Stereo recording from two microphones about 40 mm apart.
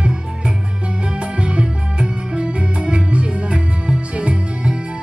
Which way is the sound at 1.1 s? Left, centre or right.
Right.